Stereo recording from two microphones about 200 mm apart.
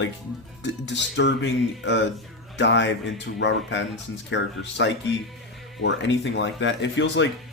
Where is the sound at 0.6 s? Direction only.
60° left (ahead or behind).